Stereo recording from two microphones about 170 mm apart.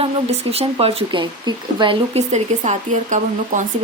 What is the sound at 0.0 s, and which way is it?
A woman's voice, 35° right (ahead or behind).